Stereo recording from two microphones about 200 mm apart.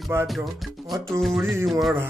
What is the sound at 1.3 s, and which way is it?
Music, 10° right (ahead or behind).